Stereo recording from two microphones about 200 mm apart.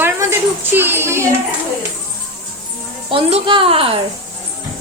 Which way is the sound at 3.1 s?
25° right (ahead or behind).